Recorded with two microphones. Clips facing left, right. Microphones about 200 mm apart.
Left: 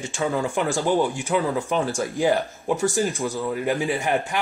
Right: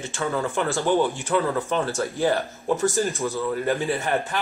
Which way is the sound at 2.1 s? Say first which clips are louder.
Left 3 dB; 15° left (ahead or behind).